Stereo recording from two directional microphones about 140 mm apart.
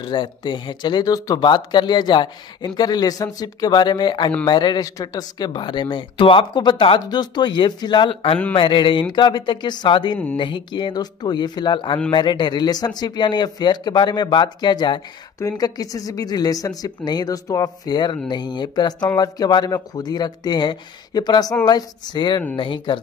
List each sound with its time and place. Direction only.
0.0 s a man's voice: 35° left (ahead or behind)